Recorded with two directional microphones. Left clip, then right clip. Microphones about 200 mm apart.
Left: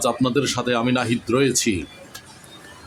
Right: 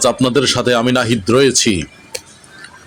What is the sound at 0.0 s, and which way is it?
Speech, 25° right (ahead or behind).